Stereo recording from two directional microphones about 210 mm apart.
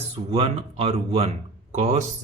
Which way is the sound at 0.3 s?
30° right (ahead or behind).